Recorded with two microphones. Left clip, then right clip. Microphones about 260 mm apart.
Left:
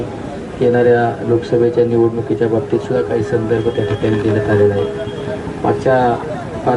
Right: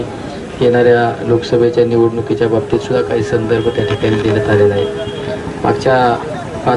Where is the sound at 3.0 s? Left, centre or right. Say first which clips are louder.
Right 2 dB; centre.